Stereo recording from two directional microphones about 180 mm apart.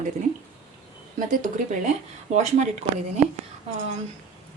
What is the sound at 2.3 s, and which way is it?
Speech, 40° right (ahead or behind).